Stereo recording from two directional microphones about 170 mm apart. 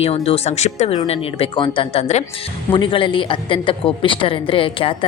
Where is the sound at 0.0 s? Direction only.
35° left (ahead or behind).